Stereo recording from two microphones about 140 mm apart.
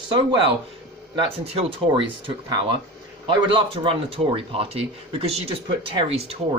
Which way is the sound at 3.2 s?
35° right (ahead or behind).